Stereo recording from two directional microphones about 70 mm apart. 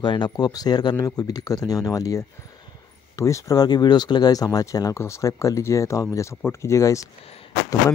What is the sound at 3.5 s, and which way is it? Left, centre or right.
Speech, left.